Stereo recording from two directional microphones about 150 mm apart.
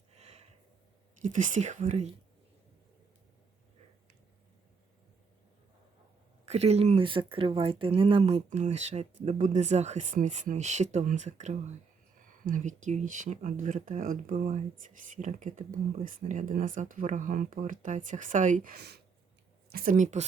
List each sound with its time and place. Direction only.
0.2 s a sound: 45° right (ahead or behind)
1.2 s speech: 55° right (ahead or behind)
6.4 s speech: 45° right (ahead or behind); by 14.3 s 65° right (ahead or behind)
14.3 s speech: 50° right (ahead or behind); by 19.0 s 90° right
19.7 s speech: 65° right (ahead or behind)